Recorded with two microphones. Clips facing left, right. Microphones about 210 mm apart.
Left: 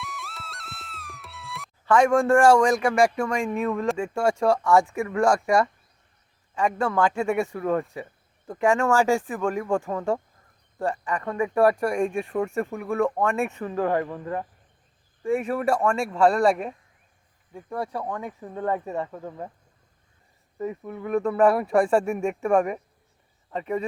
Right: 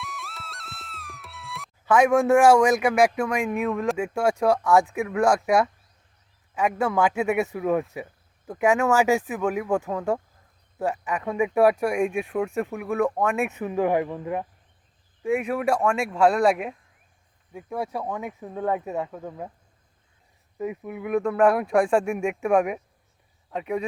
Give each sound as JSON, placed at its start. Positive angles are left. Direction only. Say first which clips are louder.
{"t": 0.0, "sound": "music", "louder": "even", "side_deg": 0}
{"t": 1.8, "sound": "a man's voice", "louder": "even", "side_deg": -5}
{"t": 20.6, "sound": "a man's voice", "louder": "right 1 dB", "side_deg": -10}